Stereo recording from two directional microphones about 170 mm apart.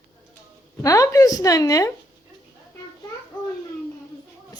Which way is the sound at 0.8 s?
20° left (ahead or behind).